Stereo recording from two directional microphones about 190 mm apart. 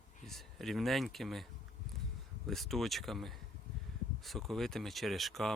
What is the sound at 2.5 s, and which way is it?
Speech, centre (ahead or behind).